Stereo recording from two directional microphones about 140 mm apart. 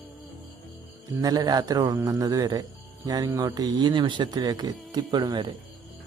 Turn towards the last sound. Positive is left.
turn(degrees=-30)  # may be behind; listen again after turning